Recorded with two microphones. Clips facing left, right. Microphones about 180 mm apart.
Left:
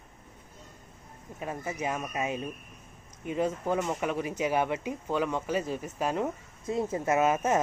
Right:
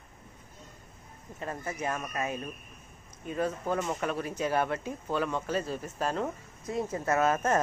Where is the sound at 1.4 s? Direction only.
10° left (ahead or behind).